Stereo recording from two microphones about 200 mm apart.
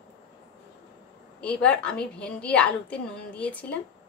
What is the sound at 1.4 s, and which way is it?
A woman's voice, 5° left (ahead or behind).